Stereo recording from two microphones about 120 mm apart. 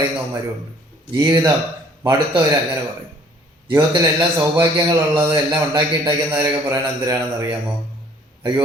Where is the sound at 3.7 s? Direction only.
40° right (ahead or behind).